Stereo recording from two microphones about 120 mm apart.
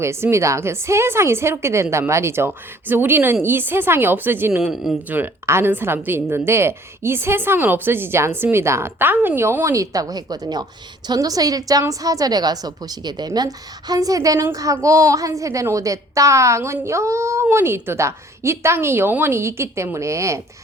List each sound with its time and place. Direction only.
0.0 s a woman's voice: 20° right (ahead or behind)
4.5 s speech: 5° right (ahead or behind)
5.0 s a woman's voice: 15° right (ahead or behind)